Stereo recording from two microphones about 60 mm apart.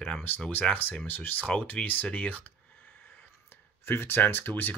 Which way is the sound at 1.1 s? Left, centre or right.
Left.